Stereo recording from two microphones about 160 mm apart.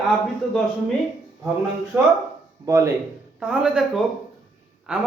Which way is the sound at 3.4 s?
5° right (ahead or behind).